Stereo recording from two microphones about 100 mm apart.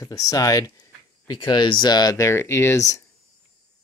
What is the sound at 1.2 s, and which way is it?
Speech, 50° left (ahead or behind).